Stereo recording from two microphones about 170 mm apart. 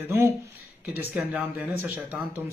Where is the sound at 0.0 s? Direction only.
15° right (ahead or behind).